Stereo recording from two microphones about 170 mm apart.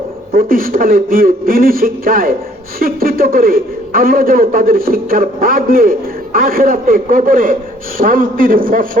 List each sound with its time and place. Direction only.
0.3 s a man's voice: 55° right (ahead or behind)